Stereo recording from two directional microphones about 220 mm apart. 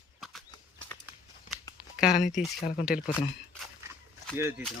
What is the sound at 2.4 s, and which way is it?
Speech, 40° left (ahead or behind).